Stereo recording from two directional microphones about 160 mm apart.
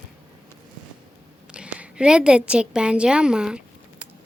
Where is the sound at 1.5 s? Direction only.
5° right (ahead or behind).